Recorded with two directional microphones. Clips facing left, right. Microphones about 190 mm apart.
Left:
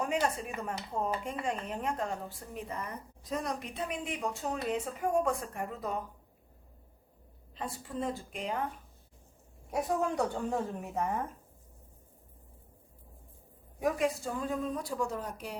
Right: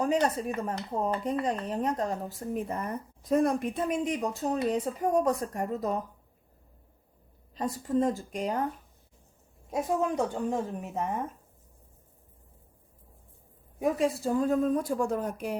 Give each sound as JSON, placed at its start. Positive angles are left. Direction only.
{"t": 0.0, "sound": "a woman's voice", "side_deg": -35}
{"t": 7.5, "sound": "a woman's voice", "side_deg": -40}
{"t": 9.7, "sound": "a woman's voice", "side_deg": -20}
{"t": 13.7, "sound": "a woman's voice", "side_deg": -25}
{"t": 14.3, "sound": "speech", "side_deg": -45}